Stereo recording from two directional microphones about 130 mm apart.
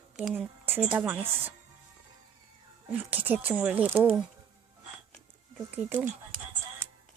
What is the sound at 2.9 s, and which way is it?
Speech, 15° right (ahead or behind).